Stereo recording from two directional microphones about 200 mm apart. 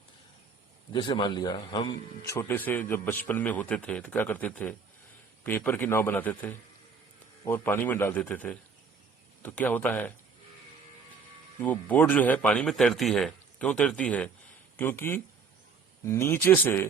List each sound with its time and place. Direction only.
0.9 s a man's voice: 25° left (ahead or behind)
11.6 s speech: 10° left (ahead or behind)